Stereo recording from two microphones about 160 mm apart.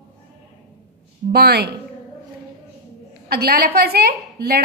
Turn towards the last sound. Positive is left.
turn(degrees=-75)  # may be behind; listen again after turning